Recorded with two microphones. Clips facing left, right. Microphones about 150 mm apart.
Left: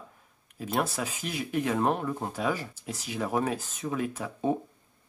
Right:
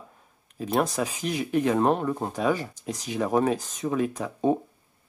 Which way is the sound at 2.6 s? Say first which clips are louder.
Right 5 dB; 15° right (ahead or behind).